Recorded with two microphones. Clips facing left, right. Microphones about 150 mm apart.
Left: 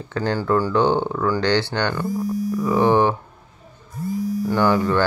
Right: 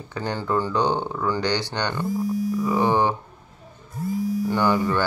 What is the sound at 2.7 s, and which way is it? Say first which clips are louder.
Speech: left 5 dB; 15° right (ahead or behind).